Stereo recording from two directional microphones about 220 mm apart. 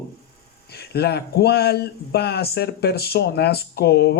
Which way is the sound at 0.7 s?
45° left (ahead or behind).